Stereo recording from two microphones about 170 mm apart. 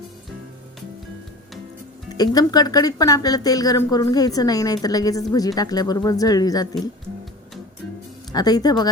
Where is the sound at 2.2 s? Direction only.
25° left (ahead or behind).